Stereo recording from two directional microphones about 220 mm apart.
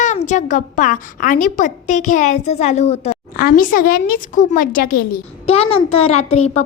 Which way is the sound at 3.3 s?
40° left (ahead or behind).